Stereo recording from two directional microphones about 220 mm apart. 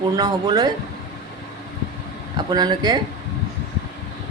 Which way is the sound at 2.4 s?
20° right (ahead or behind).